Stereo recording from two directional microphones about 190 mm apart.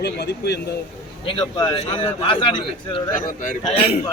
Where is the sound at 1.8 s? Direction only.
35° left (ahead or behind).